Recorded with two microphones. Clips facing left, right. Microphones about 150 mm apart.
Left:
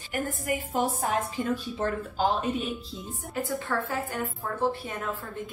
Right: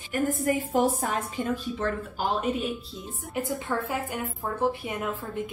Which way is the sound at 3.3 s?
20° right (ahead or behind).